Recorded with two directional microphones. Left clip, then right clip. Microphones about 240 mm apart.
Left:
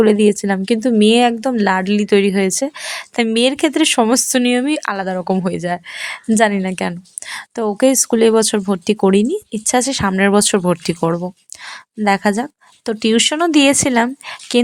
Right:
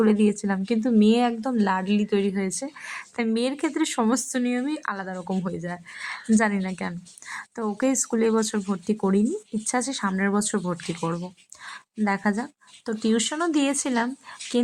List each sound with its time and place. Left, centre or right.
0.0 s a woman's voice: left